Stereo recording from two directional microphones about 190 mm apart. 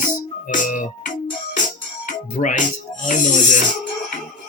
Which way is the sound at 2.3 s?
40° left (ahead or behind).